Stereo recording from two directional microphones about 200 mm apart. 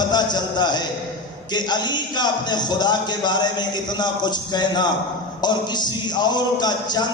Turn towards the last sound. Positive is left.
turn(degrees=20)  # may be behind; listen again after turning